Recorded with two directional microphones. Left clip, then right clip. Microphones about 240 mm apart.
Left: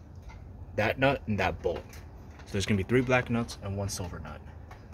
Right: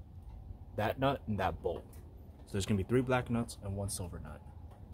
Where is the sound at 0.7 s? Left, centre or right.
Centre.